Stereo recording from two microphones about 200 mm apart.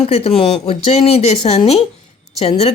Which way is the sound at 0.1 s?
30° left (ahead or behind).